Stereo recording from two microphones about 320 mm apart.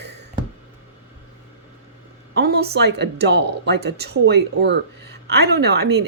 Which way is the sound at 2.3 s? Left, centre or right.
Right.